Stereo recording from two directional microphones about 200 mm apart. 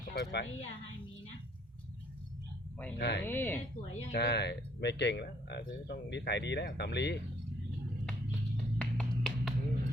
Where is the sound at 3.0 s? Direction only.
60° left (ahead or behind).